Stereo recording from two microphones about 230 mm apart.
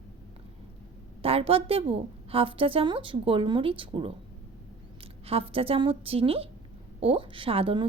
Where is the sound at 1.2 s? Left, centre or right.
Right.